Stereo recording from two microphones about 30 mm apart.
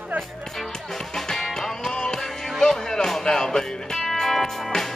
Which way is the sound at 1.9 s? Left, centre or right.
Left.